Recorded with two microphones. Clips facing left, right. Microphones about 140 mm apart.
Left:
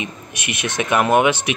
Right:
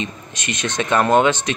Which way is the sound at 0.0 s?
10° left (ahead or behind).